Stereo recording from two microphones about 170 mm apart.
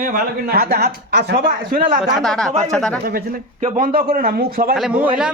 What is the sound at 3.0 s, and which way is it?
Speech, 60° right (ahead or behind).